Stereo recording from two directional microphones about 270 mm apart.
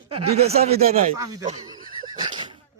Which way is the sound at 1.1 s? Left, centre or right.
Centre.